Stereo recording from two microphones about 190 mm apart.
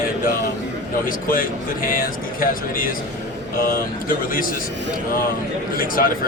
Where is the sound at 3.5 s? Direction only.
50° left (ahead or behind).